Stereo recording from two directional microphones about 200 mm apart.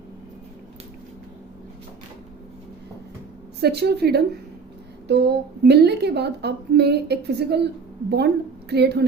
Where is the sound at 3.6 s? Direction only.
55° right (ahead or behind).